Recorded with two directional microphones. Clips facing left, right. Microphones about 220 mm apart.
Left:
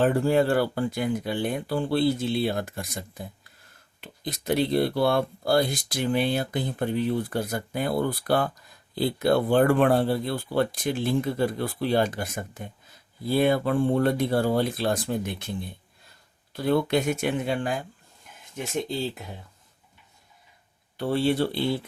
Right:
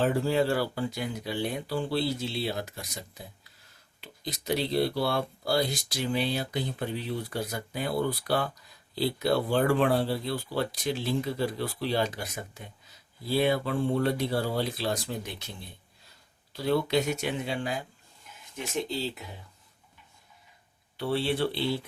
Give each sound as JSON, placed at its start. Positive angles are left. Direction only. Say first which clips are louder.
{"t": 0.0, "sound": "speech", "louder": "left 4 dB", "side_deg": 50}
{"t": 21.0, "sound": "speech", "louder": "left 4 dB", "side_deg": 45}